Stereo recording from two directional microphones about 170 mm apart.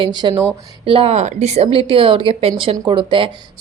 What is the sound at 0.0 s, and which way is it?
A woman's voice, 25° right (ahead or behind).